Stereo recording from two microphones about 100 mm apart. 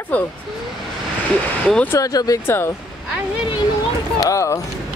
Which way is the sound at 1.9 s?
35° left (ahead or behind).